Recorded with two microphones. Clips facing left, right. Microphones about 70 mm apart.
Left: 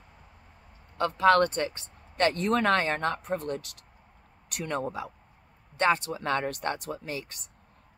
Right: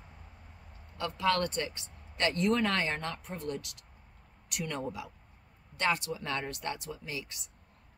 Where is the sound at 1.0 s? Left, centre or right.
Left.